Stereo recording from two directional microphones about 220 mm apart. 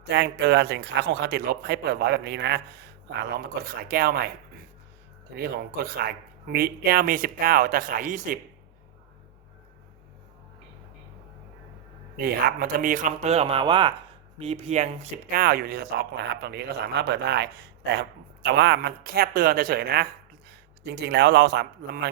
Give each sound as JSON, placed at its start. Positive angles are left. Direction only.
{"t": 0.1, "sound": "speech", "side_deg": -50}
{"t": 5.3, "sound": "speech", "side_deg": -45}
{"t": 12.1, "sound": "a man's voice", "side_deg": -45}